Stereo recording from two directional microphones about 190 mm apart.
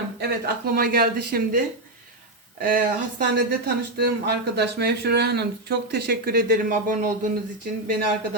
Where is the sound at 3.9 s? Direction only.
60° right (ahead or behind).